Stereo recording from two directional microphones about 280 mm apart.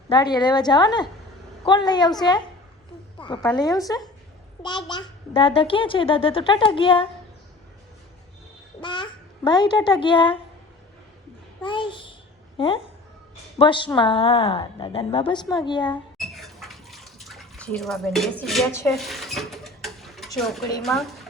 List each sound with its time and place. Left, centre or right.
0.1 s a child's voice: centre
8.8 s a child's voice: centre
11.6 s a child's voice: centre
16.1 s bathtub: centre
20.8 s speech: centre